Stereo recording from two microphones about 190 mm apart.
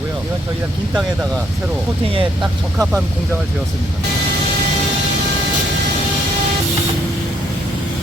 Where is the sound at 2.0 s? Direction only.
30° right (ahead or behind).